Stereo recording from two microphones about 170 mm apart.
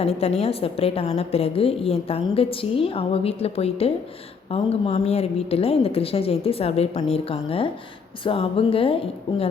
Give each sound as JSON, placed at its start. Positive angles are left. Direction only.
{"t": 0.0, "sound": "a woman's voice", "side_deg": 35}